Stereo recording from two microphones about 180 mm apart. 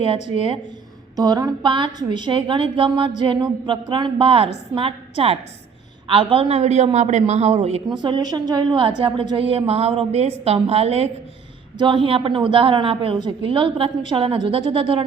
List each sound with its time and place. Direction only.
1.1 s a woman's voice: 20° right (ahead or behind)
8.0 s a woman's voice: 25° right (ahead or behind)